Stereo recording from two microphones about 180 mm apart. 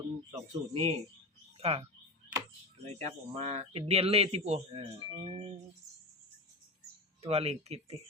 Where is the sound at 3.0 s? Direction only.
35° right (ahead or behind).